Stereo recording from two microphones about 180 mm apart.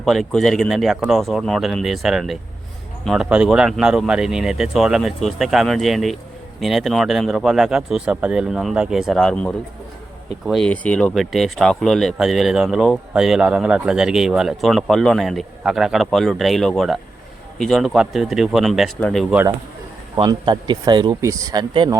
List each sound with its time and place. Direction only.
0.0 s speech: centre (ahead or behind)
20.1 s speech: 25° right (ahead or behind)